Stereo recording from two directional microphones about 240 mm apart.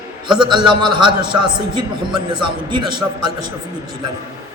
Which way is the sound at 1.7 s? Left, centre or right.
Right.